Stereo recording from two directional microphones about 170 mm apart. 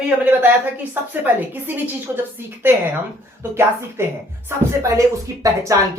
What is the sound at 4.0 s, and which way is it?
Speech, 15° right (ahead or behind).